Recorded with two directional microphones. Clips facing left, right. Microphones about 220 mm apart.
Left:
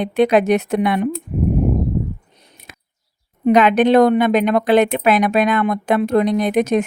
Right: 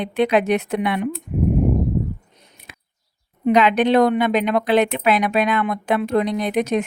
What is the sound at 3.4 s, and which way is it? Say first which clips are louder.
Speech: left 3 dB; 50° left (ahead or behind).